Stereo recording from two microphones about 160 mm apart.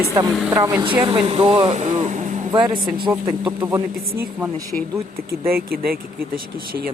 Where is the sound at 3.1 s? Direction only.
25° right (ahead or behind).